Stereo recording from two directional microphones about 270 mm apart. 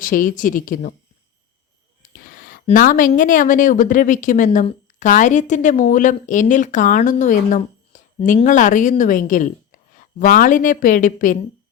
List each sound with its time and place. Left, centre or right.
0.0 s speech: left
2.0 s speech: left